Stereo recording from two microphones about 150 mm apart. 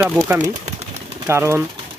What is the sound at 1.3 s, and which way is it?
Speech, 15° right (ahead or behind).